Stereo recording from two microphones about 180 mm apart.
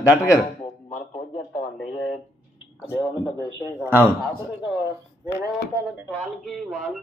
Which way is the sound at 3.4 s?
15° right (ahead or behind).